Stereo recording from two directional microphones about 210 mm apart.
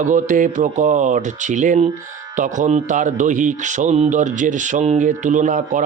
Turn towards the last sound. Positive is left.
turn(degrees=-35)  # may be behind; listen again after turning